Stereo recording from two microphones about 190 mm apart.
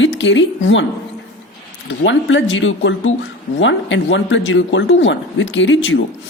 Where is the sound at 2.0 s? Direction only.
75° left (ahead or behind).